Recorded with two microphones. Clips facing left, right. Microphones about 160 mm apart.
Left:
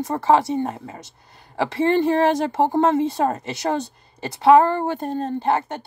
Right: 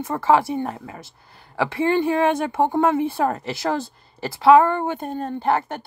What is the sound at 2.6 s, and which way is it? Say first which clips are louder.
Speech: even; 80° left.